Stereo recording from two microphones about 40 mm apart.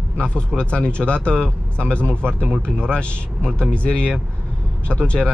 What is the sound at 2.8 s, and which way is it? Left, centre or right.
Speech, left.